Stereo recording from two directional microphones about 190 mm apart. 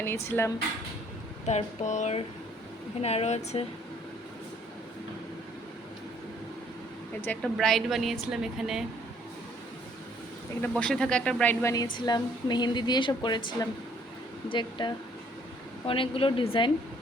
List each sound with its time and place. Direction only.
0.0 s speech: 15° left (ahead or behind)
1.5 s speech: 35° left (ahead or behind)
7.3 s speech: centre (ahead or behind)
10.6 s a woman's voice: 5° left (ahead or behind); by 16.7 s 25° left (ahead or behind)